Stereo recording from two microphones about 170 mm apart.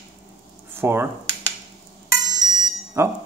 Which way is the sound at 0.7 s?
15° right (ahead or behind).